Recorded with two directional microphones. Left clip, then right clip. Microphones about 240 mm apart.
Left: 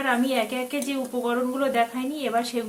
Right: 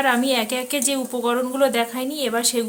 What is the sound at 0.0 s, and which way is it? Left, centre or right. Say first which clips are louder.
Speech: right 4 dB; right.